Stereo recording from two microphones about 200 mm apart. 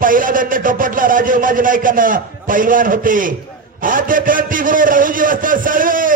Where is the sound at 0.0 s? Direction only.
45° right (ahead or behind).